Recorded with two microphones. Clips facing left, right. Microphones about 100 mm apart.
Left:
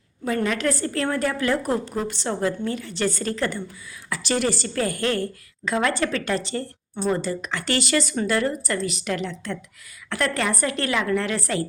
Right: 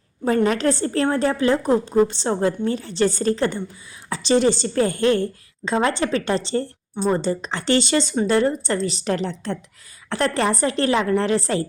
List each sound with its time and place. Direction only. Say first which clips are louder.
0.3 s a woman's voice: right 4 dB; 30° right (ahead or behind)